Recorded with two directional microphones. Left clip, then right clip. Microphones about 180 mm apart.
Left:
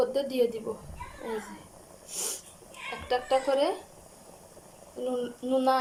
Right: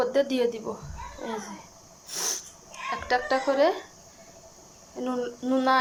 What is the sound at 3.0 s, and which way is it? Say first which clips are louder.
Speech: right 2 dB; 5° left (ahead or behind).